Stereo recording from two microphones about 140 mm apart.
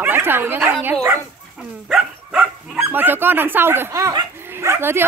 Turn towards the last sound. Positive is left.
turn(degrees=-15)  # may be behind; listen again after turning